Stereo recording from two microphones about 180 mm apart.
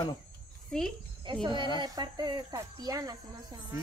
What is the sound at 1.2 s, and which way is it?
Speech, 25° right (ahead or behind).